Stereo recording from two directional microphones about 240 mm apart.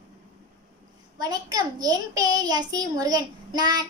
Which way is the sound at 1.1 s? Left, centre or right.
Centre.